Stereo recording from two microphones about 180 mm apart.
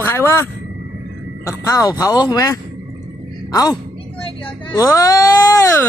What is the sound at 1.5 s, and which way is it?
Speech, 20° left (ahead or behind).